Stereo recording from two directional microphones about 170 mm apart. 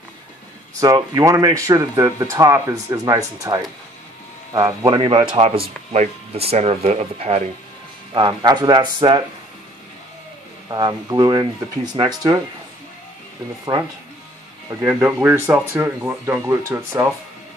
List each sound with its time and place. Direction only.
0.7 s speech: 20° right (ahead or behind); by 7.4 s 40° right (ahead or behind)
8.1 s speech: 25° right (ahead or behind)
10.7 s speech: 25° right (ahead or behind)
14.8 s speech: 15° right (ahead or behind)